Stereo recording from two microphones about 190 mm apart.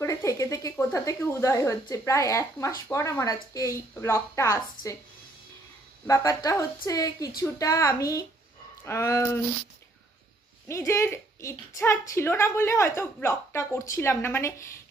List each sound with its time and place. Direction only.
0.0 s a sound: 15° left (ahead or behind)
2.9 s speech: 15° left (ahead or behind)
6.0 s speech: 15° left (ahead or behind)
10.7 s speech: 15° left (ahead or behind)